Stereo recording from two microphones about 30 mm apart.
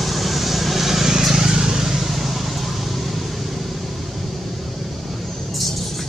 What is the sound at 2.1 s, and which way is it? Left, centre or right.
Vehicle, centre.